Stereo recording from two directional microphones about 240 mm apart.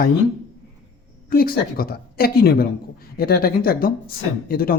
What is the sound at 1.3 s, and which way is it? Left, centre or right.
Speech, left.